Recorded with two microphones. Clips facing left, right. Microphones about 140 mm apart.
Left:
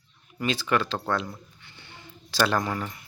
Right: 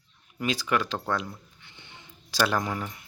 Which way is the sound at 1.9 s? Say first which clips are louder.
Left 4 dB; 10° right (ahead or behind).